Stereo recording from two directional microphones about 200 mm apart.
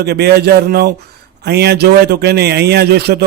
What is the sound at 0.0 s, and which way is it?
A man's voice, 55° right (ahead or behind).